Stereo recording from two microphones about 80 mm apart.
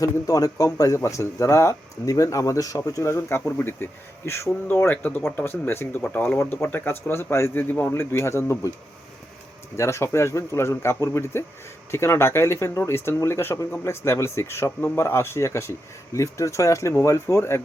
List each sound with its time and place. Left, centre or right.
0.0 s speech: left
9.7 s speech: left